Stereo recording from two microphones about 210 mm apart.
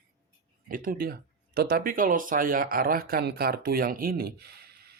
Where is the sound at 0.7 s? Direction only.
40° right (ahead or behind).